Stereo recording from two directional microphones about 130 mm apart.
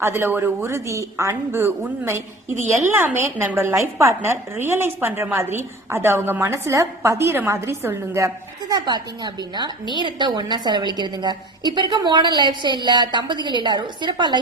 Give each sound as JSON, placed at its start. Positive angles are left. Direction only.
{"t": 0.0, "sound": "a woman's voice", "side_deg": -15}
{"t": 8.7, "sound": "a woman's voice", "side_deg": -30}